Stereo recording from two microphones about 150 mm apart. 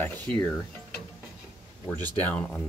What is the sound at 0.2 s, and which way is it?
Speech, 10° left (ahead or behind).